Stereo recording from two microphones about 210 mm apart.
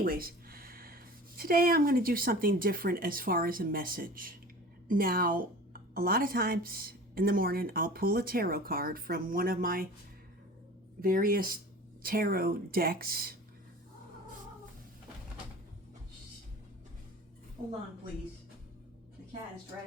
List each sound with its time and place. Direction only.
0.0 s a woman's voice: 45° right (ahead or behind)
11.0 s a woman's voice: 45° right (ahead or behind)